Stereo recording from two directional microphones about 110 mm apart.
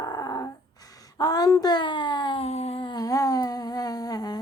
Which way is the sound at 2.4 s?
75° left (ahead or behind).